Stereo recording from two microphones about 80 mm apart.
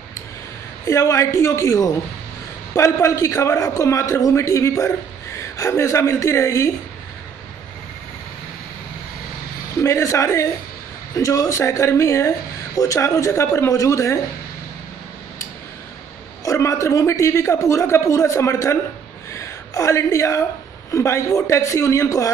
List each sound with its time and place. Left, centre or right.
0.8 s speech: left
9.8 s speech: left
16.4 s speech: left